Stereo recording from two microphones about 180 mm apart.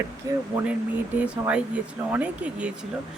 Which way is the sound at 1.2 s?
10° right (ahead or behind).